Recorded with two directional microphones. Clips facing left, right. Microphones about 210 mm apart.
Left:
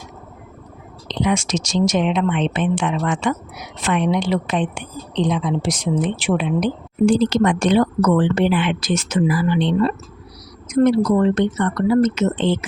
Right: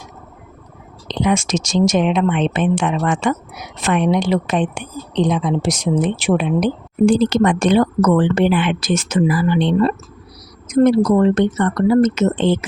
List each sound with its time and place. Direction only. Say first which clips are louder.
1.0 s a woman's voice: right 2 dB; 50° right (ahead or behind)